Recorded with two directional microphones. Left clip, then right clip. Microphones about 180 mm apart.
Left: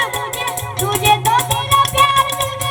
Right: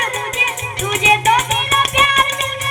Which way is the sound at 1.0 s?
45° left (ahead or behind).